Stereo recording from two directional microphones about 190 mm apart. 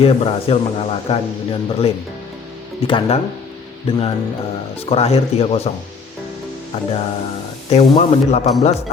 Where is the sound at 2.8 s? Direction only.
25° left (ahead or behind).